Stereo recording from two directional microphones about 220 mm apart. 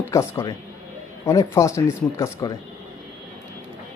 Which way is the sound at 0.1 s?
15° left (ahead or behind).